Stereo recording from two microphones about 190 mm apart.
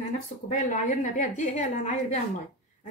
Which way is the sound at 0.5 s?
40° left (ahead or behind).